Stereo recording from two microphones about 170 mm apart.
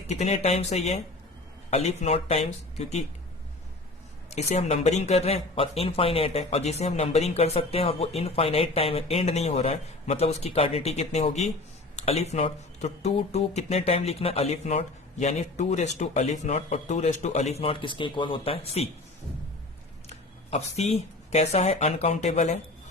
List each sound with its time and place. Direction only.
0.1 s speech: 40° left (ahead or behind)
4.3 s speech: 40° left (ahead or behind)
20.1 s a sound: 40° left (ahead or behind)
21.5 s speech: 40° left (ahead or behind)